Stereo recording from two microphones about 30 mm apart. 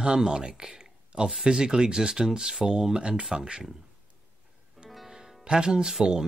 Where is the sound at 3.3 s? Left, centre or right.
Right.